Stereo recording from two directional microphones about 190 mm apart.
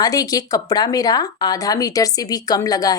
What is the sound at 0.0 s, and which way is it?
Speech, 20° left (ahead or behind).